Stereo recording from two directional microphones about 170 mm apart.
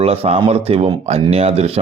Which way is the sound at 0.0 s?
35° right (ahead or behind).